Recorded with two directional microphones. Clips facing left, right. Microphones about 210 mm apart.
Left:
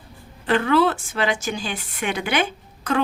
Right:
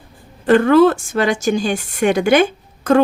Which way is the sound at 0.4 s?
45° right (ahead or behind).